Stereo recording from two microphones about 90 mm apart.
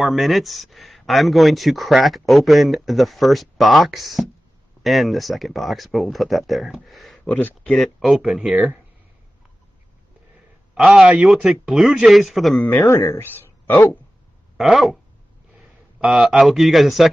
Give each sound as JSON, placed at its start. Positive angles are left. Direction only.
{"t": 0.0, "sound": "speech", "side_deg": 0}
{"t": 7.2, "sound": "speech", "side_deg": 20}
{"t": 7.7, "sound": "speech", "side_deg": 0}
{"t": 10.7, "sound": "a man's voice", "side_deg": -10}
{"t": 12.6, "sound": "a man's voice", "side_deg": 25}
{"t": 14.6, "sound": "speech", "side_deg": 0}
{"t": 16.0, "sound": "speech", "side_deg": -5}